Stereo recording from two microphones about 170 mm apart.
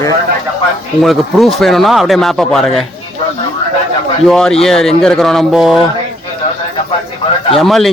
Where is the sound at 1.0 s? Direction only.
Centre (ahead or behind).